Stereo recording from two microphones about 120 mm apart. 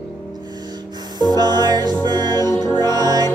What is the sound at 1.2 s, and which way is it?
Music, 35° right (ahead or behind).